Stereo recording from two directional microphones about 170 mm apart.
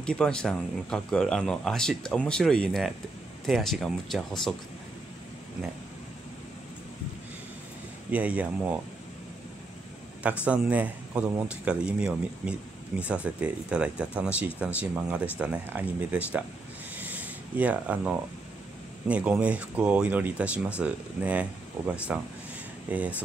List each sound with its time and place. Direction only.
0.0 s speech: 5° left (ahead or behind)
8.1 s speech: 10° right (ahead or behind)
10.2 s speech: 5° right (ahead or behind)
16.9 s a sound: 10° right (ahead or behind)
19.0 s speech: 5° right (ahead or behind)